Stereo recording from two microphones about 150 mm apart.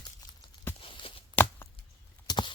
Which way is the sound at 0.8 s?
35° left (ahead or behind).